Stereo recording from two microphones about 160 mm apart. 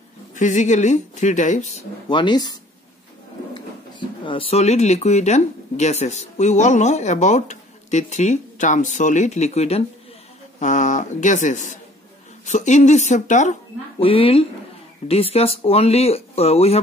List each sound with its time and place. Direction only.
0.3 s speech: 50° left (ahead or behind)
2.0 s speech: 30° left (ahead or behind)
4.3 s speech: 35° left (ahead or behind)
14.0 s speech: 35° left (ahead or behind)